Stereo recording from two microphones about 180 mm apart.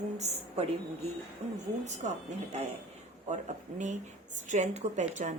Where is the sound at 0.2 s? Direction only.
35° right (ahead or behind).